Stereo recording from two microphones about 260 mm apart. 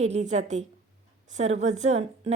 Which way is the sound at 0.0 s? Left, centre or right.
Right.